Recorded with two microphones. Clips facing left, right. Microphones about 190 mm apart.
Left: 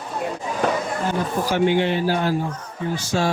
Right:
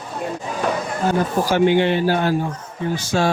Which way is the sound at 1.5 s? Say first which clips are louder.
Right 3 dB; 75° right (ahead or behind).